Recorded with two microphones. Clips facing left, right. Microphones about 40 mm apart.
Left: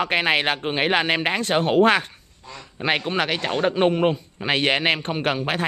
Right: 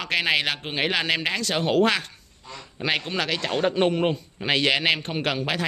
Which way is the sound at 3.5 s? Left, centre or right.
Centre.